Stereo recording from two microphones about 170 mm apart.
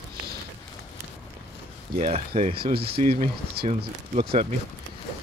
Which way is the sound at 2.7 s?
65° right (ahead or behind).